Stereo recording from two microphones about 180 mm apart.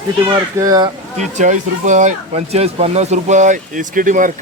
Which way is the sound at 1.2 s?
40° right (ahead or behind).